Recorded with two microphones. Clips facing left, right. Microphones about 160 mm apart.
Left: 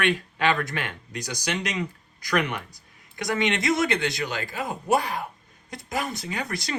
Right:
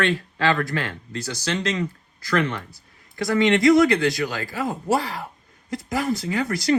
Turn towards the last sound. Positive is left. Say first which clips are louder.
# right 8 dB
turn(degrees=20)  # may be behind; listen again after turning